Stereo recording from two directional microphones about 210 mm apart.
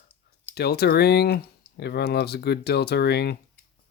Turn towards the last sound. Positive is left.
turn(degrees=50)  # may be behind; listen again after turning